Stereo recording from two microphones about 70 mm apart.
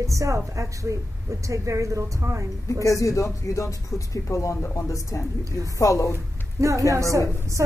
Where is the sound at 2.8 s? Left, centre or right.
Left.